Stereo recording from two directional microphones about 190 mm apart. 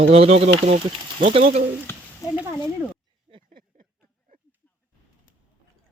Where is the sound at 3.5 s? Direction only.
50° right (ahead or behind).